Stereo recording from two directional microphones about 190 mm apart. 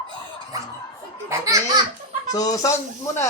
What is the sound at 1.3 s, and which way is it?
Speech, 20° right (ahead or behind).